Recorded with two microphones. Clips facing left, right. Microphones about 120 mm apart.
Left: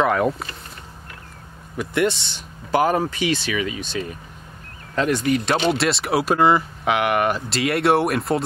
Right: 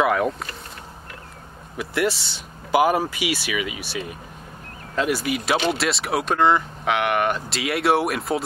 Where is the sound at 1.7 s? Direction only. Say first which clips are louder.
Left 2 dB; 5° right (ahead or behind).